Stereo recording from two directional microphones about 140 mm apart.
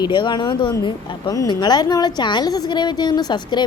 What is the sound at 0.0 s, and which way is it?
Speech, 35° left (ahead or behind).